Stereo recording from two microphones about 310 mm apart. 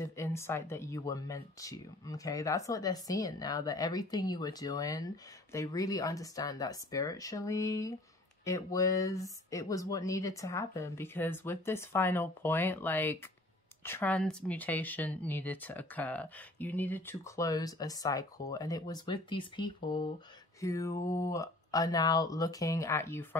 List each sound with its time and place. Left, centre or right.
0.0 s speech: centre
21.0 s speech: left
21.3 s speech: centre